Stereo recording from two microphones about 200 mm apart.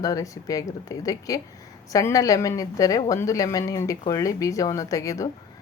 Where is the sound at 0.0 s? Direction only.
15° left (ahead or behind).